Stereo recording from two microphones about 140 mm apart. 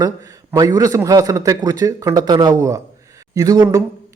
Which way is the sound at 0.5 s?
25° right (ahead or behind).